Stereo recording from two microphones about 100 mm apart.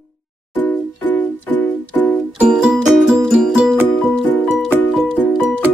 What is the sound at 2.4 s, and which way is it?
Music, 5° right (ahead or behind).